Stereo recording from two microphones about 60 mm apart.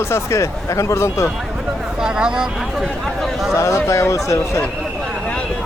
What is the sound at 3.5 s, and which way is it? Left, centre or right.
Speech, left.